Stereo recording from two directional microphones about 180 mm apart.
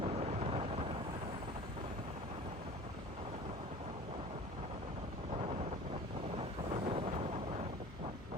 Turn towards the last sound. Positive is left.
turn(degrees=-30)  # may be behind; listen again after turning